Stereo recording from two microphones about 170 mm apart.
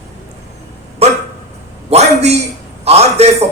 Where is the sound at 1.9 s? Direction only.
40° right (ahead or behind).